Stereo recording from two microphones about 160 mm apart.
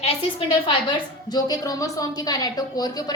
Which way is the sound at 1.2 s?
25° left (ahead or behind).